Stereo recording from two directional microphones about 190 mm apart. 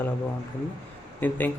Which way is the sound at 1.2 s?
10° left (ahead or behind).